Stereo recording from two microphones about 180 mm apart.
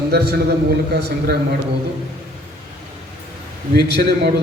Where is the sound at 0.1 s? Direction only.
65° right (ahead or behind).